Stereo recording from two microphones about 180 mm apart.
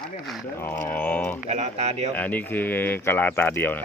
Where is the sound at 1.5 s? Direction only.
40° right (ahead or behind).